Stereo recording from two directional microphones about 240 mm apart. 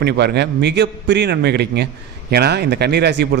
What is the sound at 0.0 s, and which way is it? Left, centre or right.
A man's voice, right.